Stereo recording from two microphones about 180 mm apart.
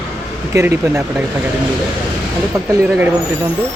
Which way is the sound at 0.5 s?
15° right (ahead or behind).